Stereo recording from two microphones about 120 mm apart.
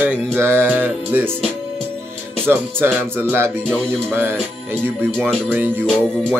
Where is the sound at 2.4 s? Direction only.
20° right (ahead or behind).